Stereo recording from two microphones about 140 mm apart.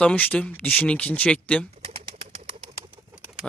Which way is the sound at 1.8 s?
45° right (ahead or behind).